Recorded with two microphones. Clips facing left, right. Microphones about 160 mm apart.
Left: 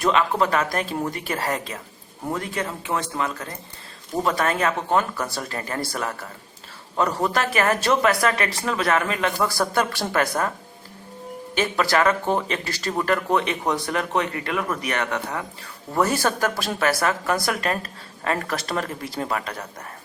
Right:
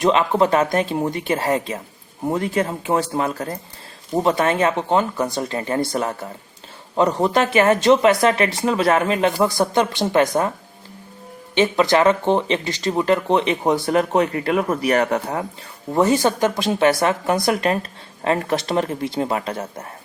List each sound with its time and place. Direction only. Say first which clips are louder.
0.0 s speech: right 4 dB; 30° right (ahead or behind)
11.5 s speech: right 5 dB; 20° right (ahead or behind)
13.8 s speech: right 7 dB; 35° right (ahead or behind)
16.0 s speech: right 5 dB; 20° right (ahead or behind)